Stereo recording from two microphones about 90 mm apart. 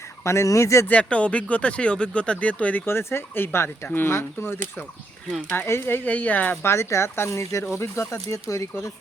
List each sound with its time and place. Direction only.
0.3 s speech: 35° left (ahead or behind)
0.9 s speech: 15° left (ahead or behind)
2.8 s speech: 25° left (ahead or behind)